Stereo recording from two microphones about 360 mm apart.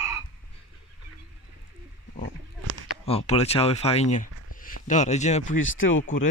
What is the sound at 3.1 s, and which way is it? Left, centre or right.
Speech, centre.